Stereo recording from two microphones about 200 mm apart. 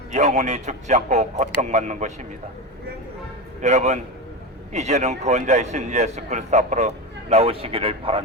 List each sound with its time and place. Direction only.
0.1 s a man's voice: 35° right (ahead or behind)
3.6 s a man's voice: 35° right (ahead or behind)